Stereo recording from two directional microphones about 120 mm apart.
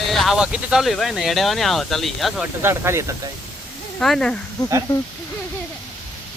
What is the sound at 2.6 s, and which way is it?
Speech, 20° right (ahead or behind).